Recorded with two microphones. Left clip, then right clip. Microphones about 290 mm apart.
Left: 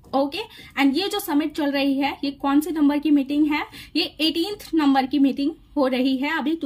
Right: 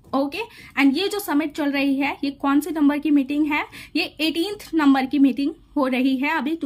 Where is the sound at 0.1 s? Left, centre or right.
Centre.